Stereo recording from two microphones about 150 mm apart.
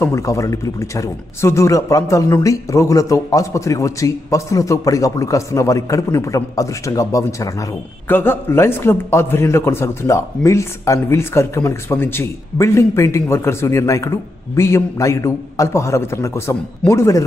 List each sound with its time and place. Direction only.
0.0 s a man's voice: 20° left (ahead or behind)